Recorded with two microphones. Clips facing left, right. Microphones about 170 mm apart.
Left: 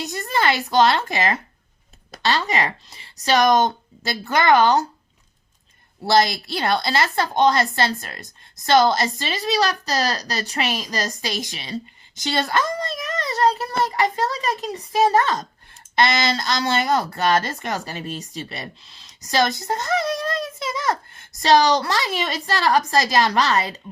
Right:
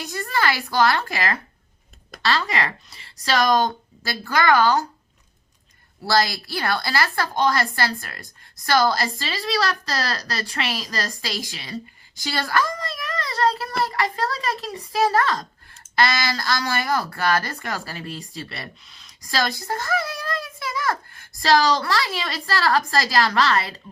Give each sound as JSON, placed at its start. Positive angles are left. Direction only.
{"t": 0.0, "sound": "a woman's voice", "side_deg": 20}
{"t": 6.1, "sound": "a woman's voice", "side_deg": 20}